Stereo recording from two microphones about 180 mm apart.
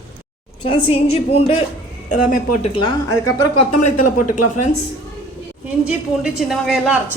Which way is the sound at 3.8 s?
45° left (ahead or behind).